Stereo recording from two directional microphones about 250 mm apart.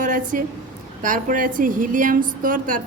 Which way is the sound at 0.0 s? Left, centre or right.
Right.